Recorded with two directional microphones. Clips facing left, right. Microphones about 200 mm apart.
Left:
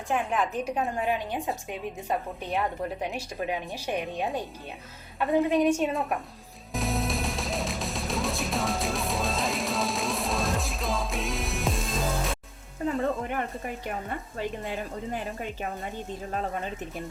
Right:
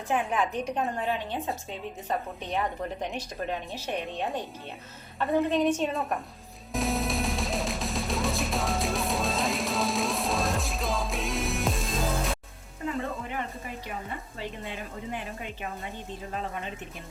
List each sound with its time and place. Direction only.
0.1 s a woman's voice: centre (ahead or behind)
6.7 s music: centre (ahead or behind)